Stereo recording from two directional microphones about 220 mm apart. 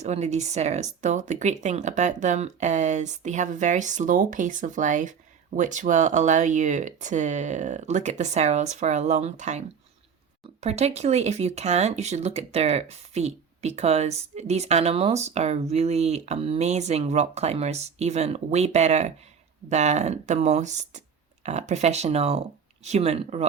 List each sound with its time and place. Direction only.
0.0 s speech: 30° right (ahead or behind)